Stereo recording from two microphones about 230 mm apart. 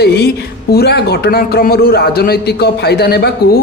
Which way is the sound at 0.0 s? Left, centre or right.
Left.